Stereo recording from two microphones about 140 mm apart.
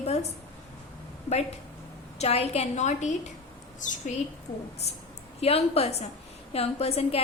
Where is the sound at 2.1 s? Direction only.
50° left (ahead or behind).